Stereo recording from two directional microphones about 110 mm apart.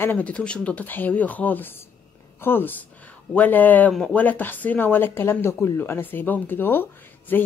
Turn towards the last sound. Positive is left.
turn(degrees=20)  # may be behind; listen again after turning